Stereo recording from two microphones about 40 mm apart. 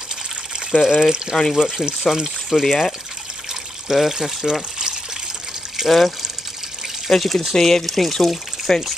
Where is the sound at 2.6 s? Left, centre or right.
Centre.